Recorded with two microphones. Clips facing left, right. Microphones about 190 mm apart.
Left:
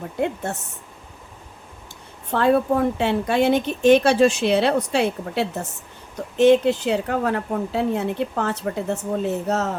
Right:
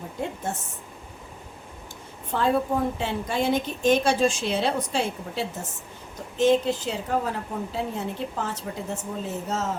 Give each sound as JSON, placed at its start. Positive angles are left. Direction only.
{"t": 0.5, "sound": "a woman's voice", "side_deg": 65}
{"t": 2.3, "sound": "a woman's voice", "side_deg": 65}